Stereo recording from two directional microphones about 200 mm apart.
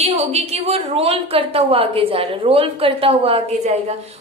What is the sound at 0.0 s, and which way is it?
A woman's voice, 30° right (ahead or behind).